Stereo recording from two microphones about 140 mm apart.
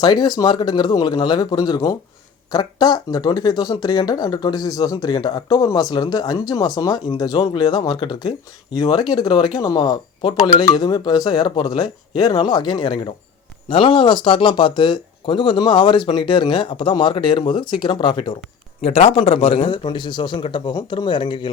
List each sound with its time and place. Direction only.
0.0 s a man's voice: 30° left (ahead or behind)